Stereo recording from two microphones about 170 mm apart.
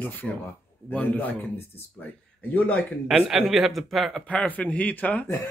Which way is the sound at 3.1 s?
Centre (ahead or behind).